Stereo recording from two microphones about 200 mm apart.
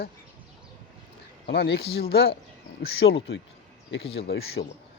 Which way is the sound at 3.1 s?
75° left (ahead or behind).